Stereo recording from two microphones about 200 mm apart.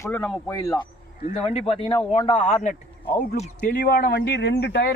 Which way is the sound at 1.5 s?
30° left (ahead or behind).